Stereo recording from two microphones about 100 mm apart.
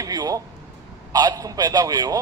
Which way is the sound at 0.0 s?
40° right (ahead or behind).